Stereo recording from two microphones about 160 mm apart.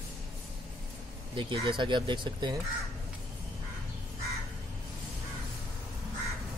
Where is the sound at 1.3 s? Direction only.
30° right (ahead or behind).